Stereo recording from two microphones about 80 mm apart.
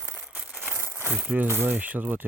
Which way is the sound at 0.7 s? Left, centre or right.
Right.